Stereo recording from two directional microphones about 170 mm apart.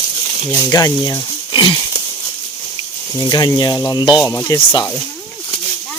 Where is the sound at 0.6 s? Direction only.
20° left (ahead or behind).